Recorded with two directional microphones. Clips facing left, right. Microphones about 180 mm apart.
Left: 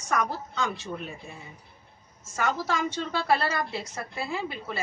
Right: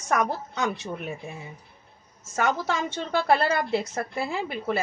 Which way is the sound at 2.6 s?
60° right (ahead or behind).